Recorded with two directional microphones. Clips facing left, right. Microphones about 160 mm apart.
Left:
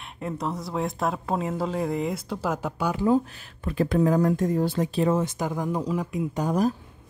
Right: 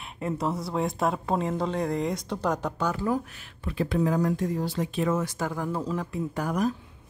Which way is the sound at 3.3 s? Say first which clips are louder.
Left 2 dB; 35° left (ahead or behind).